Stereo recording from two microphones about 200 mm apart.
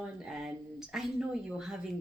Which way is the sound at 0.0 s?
5° right (ahead or behind).